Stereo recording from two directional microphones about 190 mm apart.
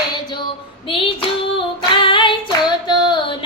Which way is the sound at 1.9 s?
25° left (ahead or behind).